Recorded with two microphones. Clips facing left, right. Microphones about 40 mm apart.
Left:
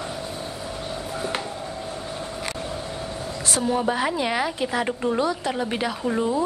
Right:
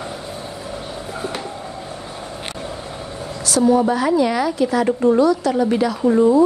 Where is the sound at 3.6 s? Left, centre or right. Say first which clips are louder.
Right 8 dB; centre.